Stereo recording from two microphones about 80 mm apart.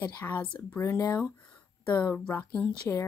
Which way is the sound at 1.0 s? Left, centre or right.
Left.